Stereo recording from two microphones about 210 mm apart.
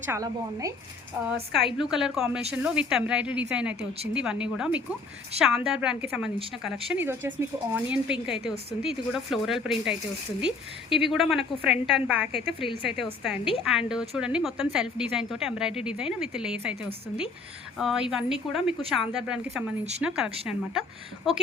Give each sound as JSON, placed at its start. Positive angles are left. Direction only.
{"t": 0.0, "sound": "speech", "side_deg": -15}
{"t": 1.5, "sound": "a woman's voice", "side_deg": 0}
{"t": 12.5, "sound": "a woman's voice", "side_deg": 25}
{"t": 13.0, "sound": "a woman's voice", "side_deg": -5}